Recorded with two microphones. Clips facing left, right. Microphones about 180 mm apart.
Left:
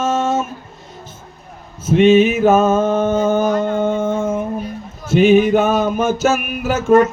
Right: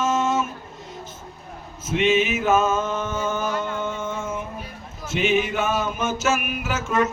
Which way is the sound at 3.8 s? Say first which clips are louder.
Left 11 dB; 60° left (ahead or behind).